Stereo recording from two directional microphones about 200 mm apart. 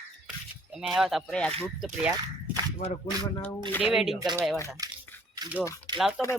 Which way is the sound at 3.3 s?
15° left (ahead or behind).